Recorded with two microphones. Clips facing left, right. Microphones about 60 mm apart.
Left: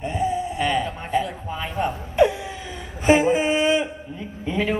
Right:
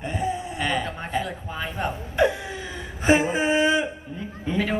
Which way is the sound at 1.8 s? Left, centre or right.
Right.